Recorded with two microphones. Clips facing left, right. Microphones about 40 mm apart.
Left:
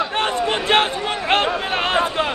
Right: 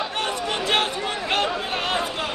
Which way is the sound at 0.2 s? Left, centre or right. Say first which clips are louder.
Left 4 dB; left.